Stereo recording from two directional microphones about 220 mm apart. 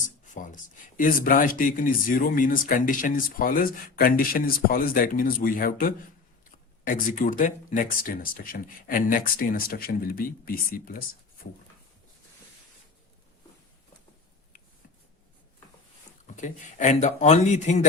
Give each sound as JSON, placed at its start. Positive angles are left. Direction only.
{"t": 0.3, "sound": "speech", "side_deg": 35}
{"t": 16.2, "sound": "speech", "side_deg": 35}